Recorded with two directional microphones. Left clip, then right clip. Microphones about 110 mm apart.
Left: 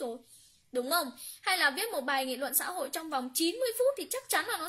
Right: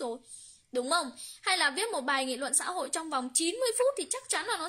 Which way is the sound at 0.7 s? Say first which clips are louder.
Right 1 dB; 35° right (ahead or behind).